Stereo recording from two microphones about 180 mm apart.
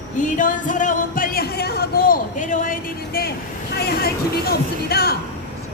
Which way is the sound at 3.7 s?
60° left (ahead or behind).